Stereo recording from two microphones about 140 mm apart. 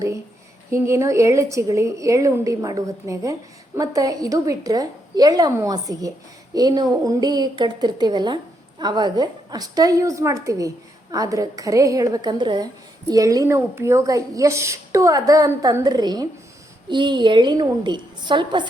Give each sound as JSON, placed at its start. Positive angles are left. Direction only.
{"t": 0.7, "sound": "a woman's voice", "side_deg": -20}